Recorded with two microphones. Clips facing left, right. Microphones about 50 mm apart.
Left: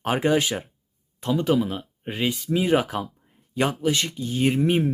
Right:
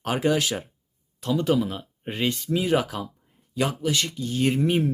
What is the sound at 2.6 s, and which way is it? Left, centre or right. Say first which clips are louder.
Speech: left 2 dB; centre.